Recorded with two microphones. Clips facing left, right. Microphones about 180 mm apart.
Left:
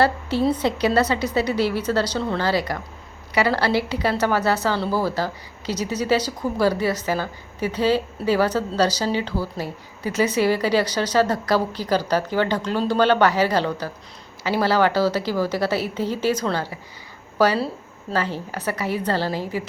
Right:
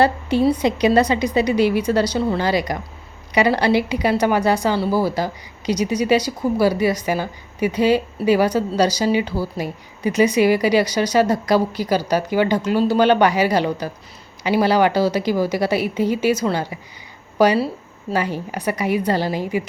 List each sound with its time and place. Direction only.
0.0 s a woman's voice: 15° right (ahead or behind)